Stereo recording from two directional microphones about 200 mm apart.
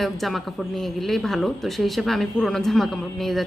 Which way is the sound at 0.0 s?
Centre (ahead or behind).